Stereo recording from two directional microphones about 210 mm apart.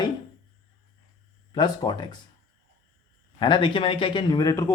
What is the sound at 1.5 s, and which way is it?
Speech, 20° left (ahead or behind).